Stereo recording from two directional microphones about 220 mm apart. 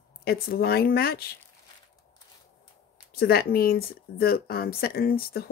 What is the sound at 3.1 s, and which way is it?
Speech, 45° left (ahead or behind).